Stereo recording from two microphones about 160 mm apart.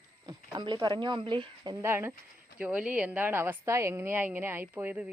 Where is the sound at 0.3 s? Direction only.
25° right (ahead or behind).